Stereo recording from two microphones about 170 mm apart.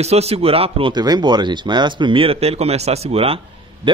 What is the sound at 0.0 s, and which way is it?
A man's voice, 40° right (ahead or behind).